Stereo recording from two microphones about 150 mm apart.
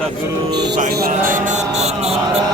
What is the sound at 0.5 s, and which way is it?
Speech, 70° right (ahead or behind).